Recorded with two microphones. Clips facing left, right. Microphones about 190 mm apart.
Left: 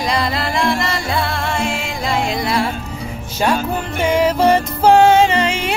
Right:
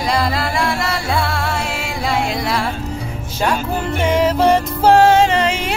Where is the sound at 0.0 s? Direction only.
5° right (ahead or behind).